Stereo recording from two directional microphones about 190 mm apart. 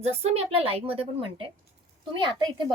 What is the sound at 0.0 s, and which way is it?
A woman's voice, 35° right (ahead or behind).